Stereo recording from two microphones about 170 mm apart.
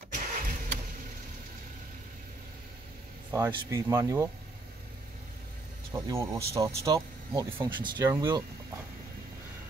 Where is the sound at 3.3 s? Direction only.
20° right (ahead or behind).